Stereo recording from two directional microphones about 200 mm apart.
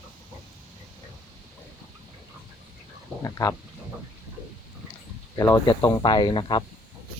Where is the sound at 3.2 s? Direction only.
15° left (ahead or behind).